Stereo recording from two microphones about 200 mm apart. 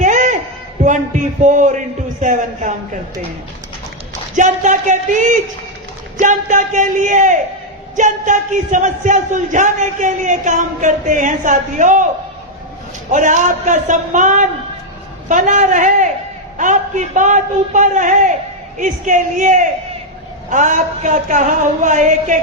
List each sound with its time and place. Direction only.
0.0 s a sound: 40° right (ahead or behind)
0.8 s a man's voice: 35° right (ahead or behind)
4.4 s a man's voice: 40° right (ahead or behind)
13.1 s a man's voice: 40° right (ahead or behind)